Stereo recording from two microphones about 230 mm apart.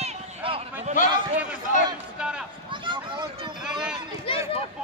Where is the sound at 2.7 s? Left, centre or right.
Right.